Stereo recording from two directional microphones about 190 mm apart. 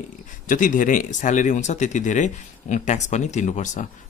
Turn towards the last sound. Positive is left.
turn(degrees=40)  # may be behind; listen again after turning